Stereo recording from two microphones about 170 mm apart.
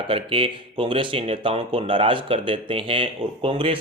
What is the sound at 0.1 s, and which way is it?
Speech, 30° right (ahead or behind).